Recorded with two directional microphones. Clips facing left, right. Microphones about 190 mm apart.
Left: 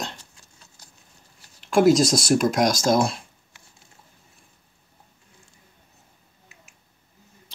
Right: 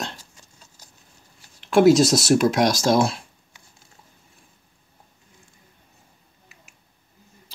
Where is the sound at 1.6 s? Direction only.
Centre (ahead or behind).